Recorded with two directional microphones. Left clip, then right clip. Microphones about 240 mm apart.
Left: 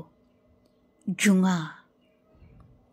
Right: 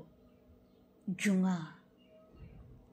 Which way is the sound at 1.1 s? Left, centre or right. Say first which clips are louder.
Left 10 dB; left.